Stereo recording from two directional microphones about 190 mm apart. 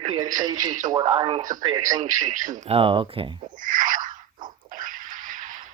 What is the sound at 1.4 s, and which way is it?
Speech, 40° right (ahead or behind).